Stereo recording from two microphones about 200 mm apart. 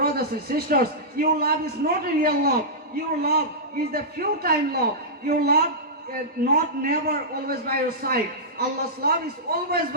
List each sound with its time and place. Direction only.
0.0 s a man's voice: 50° right (ahead or behind)
3.9 s a man's voice: 50° right (ahead or behind)